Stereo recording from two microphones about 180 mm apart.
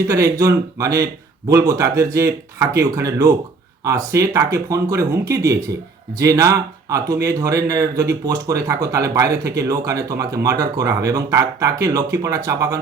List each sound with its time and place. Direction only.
0.1 s speech: 15° right (ahead or behind)